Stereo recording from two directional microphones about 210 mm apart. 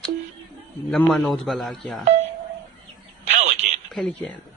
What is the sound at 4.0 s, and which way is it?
Speech, 5° left (ahead or behind).